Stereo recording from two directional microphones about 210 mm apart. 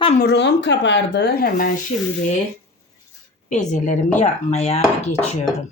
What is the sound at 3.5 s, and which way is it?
Speech, 35° left (ahead or behind).